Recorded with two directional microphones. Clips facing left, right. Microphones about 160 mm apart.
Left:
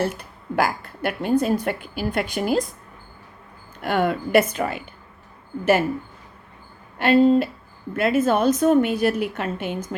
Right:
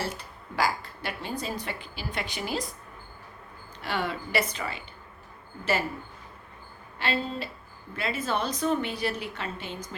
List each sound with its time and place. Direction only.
0.0 s a woman's voice: 55° left (ahead or behind)
3.8 s a woman's voice: 50° left (ahead or behind)
7.0 s a woman's voice: 55° left (ahead or behind)